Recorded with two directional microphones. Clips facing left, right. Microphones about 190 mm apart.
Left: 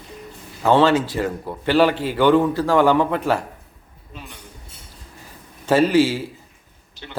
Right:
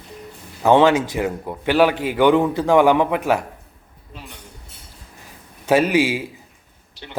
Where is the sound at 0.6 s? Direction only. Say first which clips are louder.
Right 2 dB; 15° right (ahead or behind).